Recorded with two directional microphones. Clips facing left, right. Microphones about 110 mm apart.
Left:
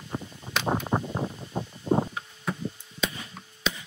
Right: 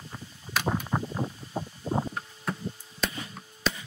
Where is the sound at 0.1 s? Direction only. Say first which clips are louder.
Left 2 dB; 25° left (ahead or behind).